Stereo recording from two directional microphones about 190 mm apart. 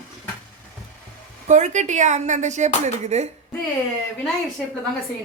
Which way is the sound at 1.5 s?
40° right (ahead or behind).